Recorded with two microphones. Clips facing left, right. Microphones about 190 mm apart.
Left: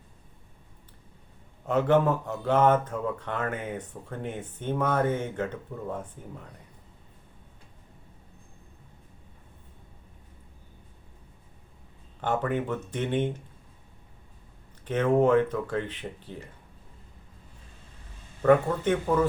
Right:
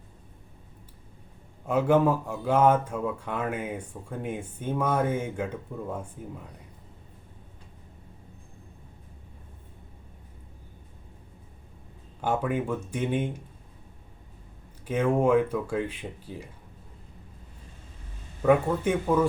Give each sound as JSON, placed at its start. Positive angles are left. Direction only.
{"t": 1.6, "sound": "speech", "side_deg": -10}
{"t": 12.2, "sound": "speech", "side_deg": -10}
{"t": 14.8, "sound": "speech", "side_deg": -10}
{"t": 18.4, "sound": "speech", "side_deg": -10}